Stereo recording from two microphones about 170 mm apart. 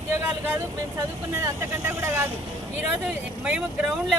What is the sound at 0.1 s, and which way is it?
Vehicle, 10° right (ahead or behind).